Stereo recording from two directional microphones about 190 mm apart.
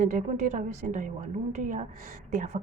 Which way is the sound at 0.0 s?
45° right (ahead or behind).